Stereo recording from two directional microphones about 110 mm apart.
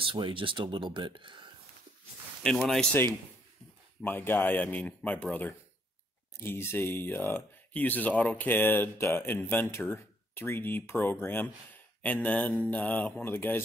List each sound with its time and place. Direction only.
0.0 s speech: 50° right (ahead or behind)
2.4 s speech: 5° left (ahead or behind)
4.0 s speech: 20° left (ahead or behind)